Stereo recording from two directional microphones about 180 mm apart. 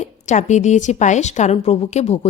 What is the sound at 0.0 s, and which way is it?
A woman's voice, 45° left (ahead or behind).